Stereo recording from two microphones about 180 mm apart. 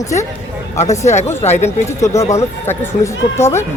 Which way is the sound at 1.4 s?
40° left (ahead or behind).